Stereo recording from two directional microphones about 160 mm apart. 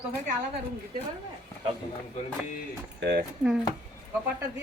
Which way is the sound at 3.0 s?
90° right.